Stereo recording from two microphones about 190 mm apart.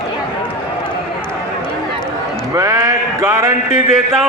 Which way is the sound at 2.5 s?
15° right (ahead or behind).